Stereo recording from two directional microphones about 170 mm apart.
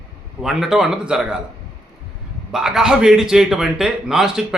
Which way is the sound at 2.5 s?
Centre (ahead or behind).